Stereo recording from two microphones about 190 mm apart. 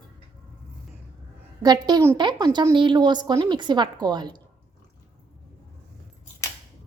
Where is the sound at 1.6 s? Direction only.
20° right (ahead or behind).